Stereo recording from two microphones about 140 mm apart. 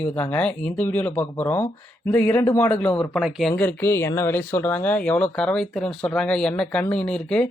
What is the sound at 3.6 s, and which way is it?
Speech, 15° left (ahead or behind).